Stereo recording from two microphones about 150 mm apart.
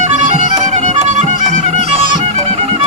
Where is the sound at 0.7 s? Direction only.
50° right (ahead or behind).